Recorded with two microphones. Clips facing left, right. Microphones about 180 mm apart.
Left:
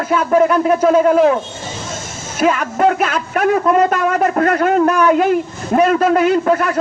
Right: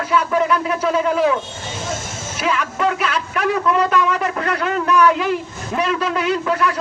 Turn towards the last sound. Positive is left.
turn(degrees=50)  # may be behind; listen again after turning